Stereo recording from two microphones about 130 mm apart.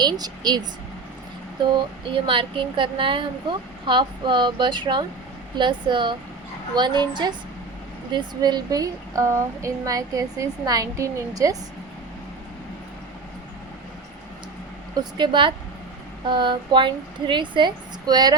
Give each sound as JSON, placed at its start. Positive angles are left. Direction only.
{"t": 0.0, "sound": "speech", "side_deg": -30}
{"t": 2.1, "sound": "speech", "side_deg": -40}
{"t": 14.9, "sound": "speech", "side_deg": -35}